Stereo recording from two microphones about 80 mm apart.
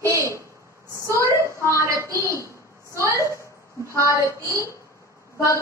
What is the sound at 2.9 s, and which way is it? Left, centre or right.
Speech, left.